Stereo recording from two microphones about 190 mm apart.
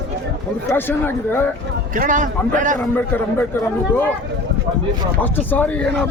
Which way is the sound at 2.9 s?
10° left (ahead or behind).